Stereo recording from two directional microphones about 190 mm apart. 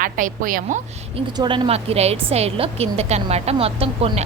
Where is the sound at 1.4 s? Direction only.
25° right (ahead or behind).